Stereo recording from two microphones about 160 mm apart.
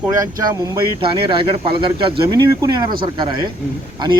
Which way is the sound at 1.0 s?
35° right (ahead or behind).